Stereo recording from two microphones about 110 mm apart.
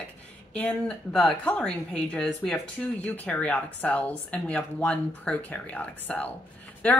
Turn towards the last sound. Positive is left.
turn(degrees=15)  # may be behind; listen again after turning